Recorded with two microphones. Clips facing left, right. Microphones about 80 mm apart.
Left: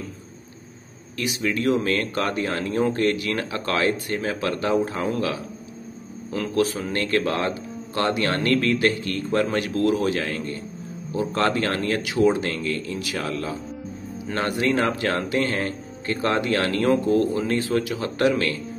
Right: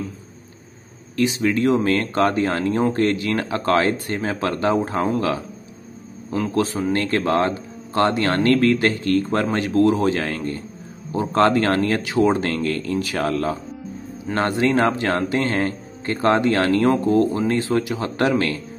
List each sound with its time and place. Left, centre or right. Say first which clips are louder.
1.1 s speech: right 6 dB; right
6.5 s speech: right 1 dB; right
14.3 s speech: right 4 dB; right